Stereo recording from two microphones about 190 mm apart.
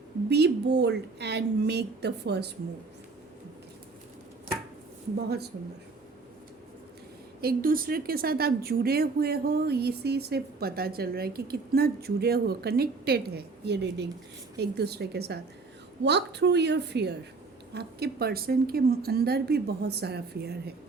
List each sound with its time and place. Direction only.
0.3 s a woman's voice: 60° right (ahead or behind)
7.4 s a woman's voice: 50° right (ahead or behind)